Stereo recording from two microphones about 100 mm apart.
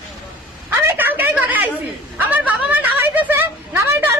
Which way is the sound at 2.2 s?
15° right (ahead or behind).